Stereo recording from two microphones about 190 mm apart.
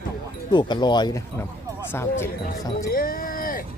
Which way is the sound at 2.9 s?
50° left (ahead or behind).